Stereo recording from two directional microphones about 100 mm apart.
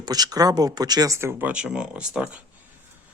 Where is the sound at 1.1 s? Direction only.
25° right (ahead or behind).